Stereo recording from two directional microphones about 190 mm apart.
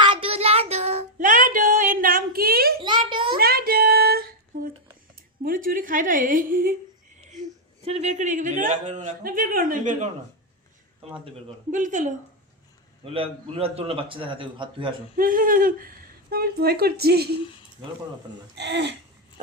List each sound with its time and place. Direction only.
0.0 s child singing: 25° right (ahead or behind); by 2.7 s 55° right (ahead or behind)
2.8 s a sound: 25° right (ahead or behind)
3.3 s child singing: 50° right (ahead or behind)
5.4 s a woman's voice: 45° right (ahead or behind)
7.3 s speech: 35° right (ahead or behind)
11.7 s a sound: 40° right (ahead or behind)
13.1 s a man's voice: 30° right (ahead or behind)
15.1 s a sound: 45° right (ahead or behind)
16.3 s speech: 55° right (ahead or behind)
18.5 s speech: 65° right (ahead or behind)